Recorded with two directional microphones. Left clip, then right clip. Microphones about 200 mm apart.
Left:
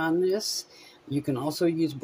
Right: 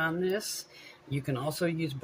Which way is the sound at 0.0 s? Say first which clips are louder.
Left 5 dB; 55° left (ahead or behind).